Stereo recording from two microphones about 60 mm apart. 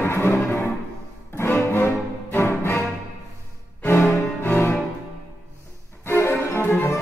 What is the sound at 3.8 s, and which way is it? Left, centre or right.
Music, left.